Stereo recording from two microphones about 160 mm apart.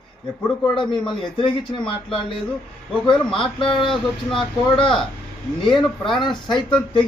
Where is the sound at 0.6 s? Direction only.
30° left (ahead or behind).